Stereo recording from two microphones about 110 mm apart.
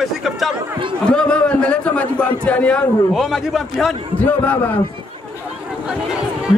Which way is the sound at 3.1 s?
Centre (ahead or behind).